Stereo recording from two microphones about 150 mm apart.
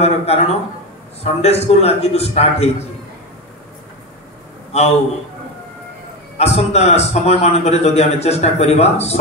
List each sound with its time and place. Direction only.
0.0 s a man's voice: 45° left (ahead or behind)
4.7 s a man's voice: 45° left (ahead or behind)
6.3 s a man's voice: 45° left (ahead or behind)